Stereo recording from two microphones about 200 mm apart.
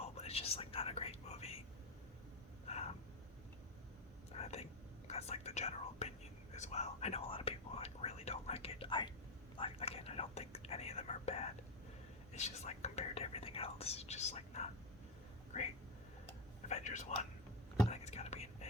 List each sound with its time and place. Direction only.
0.0 s whispering: 30° left (ahead or behind)
2.6 s a sound: 30° left (ahead or behind)
4.3 s whispering: 30° left (ahead or behind)
16.6 s whispering: 35° left (ahead or behind)